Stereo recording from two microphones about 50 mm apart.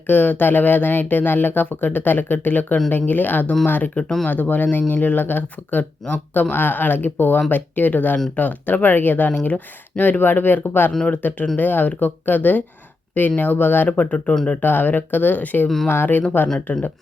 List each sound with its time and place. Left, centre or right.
0.1 s speech: left
9.3 s speech: left
14.6 s speech: left
15.9 s speech: left